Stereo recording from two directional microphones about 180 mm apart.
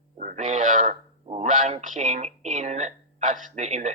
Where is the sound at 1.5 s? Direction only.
40° right (ahead or behind).